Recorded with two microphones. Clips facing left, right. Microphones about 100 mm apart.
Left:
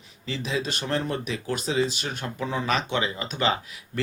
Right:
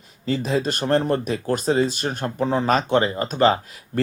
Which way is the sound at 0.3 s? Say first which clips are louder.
Right 7 dB; 45° right (ahead or behind).